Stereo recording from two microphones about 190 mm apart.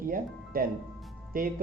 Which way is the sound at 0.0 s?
50° right (ahead or behind).